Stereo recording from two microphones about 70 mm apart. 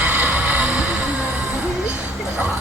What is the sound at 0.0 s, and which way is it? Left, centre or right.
Music, right.